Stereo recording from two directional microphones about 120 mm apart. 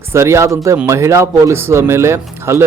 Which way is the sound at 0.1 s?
25° right (ahead or behind).